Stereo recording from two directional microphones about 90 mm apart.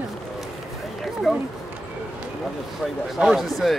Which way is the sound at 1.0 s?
Centre (ahead or behind).